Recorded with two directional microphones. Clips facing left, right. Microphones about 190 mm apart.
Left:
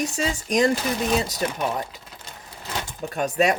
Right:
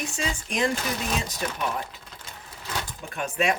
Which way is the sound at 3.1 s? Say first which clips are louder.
Left 5 dB; 40° left (ahead or behind).